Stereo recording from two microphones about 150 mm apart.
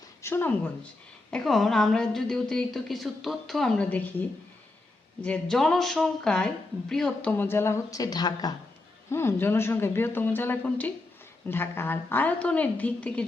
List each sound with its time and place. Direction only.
0.2 s speech: 15° left (ahead or behind)
1.3 s a woman's voice: centre (ahead or behind)